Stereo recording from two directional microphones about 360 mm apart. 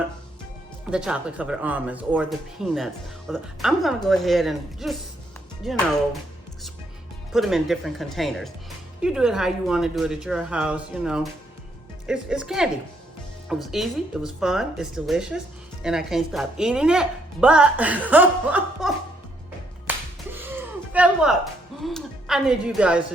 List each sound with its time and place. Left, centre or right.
0.9 s speech: centre
7.3 s speech: centre
19.9 s music: centre
20.3 s a sound: centre